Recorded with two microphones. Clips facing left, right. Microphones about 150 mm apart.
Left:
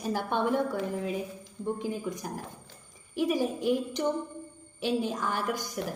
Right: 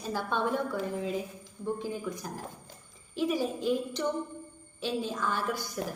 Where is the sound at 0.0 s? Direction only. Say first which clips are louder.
Left 2 dB; 15° left (ahead or behind).